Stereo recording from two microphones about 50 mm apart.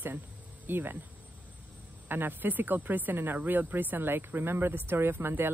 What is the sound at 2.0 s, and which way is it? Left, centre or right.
Speech, right.